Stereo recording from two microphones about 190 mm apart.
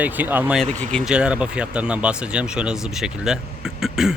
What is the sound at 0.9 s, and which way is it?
Speech, 5° right (ahead or behind).